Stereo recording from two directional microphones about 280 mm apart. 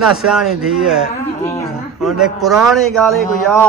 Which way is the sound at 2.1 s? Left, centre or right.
Centre.